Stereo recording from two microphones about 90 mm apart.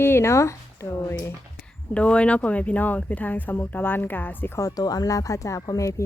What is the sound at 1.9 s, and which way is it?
Speech, 15° left (ahead or behind).